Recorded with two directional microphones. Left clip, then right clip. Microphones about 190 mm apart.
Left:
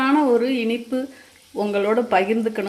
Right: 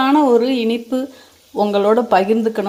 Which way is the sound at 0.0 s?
20° right (ahead or behind).